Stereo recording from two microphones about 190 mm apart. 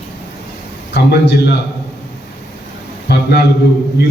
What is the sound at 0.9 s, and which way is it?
Speech, 60° left (ahead or behind).